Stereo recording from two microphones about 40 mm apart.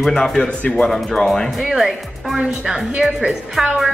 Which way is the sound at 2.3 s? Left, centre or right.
Centre.